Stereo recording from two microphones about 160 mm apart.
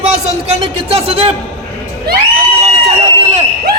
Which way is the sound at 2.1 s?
80° right.